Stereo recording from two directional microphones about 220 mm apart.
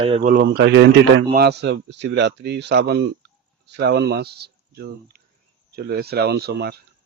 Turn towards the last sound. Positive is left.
turn(degrees=-45)  # may be behind; listen again after turning